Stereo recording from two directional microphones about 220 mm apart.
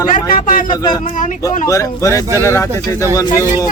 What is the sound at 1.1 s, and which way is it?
Speech, 35° left (ahead or behind).